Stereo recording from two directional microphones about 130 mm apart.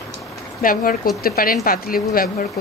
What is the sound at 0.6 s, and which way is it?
Speech, 90° left.